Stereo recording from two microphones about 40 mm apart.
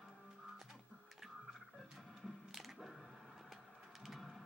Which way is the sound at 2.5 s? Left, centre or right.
Centre.